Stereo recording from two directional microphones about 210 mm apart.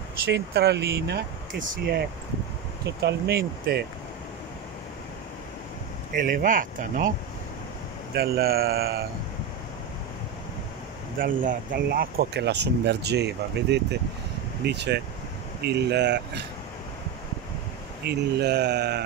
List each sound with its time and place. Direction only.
0.3 s speech: 50° right (ahead or behind)
3.0 s speech: 50° right (ahead or behind)
6.1 s speech: 40° right (ahead or behind)
8.1 s speech: 45° right (ahead or behind)
11.1 s speech: 40° right (ahead or behind)
18.0 s speech: 50° right (ahead or behind)